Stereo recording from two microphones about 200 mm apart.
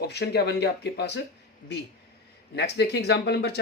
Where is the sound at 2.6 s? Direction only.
55° left (ahead or behind).